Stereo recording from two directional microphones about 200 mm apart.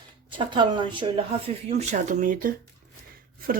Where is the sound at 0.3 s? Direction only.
25° right (ahead or behind).